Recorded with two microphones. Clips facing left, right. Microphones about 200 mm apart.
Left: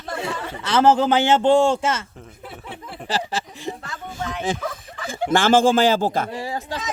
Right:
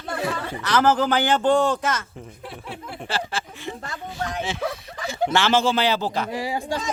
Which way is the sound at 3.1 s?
40° left (ahead or behind).